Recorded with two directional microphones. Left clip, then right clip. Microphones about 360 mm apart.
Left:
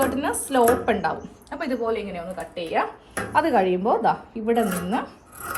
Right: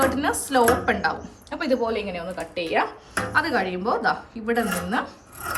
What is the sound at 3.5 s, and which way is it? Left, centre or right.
Speech, centre.